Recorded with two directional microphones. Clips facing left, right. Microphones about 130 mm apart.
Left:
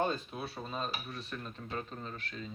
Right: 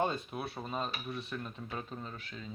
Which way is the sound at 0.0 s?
10° right (ahead or behind).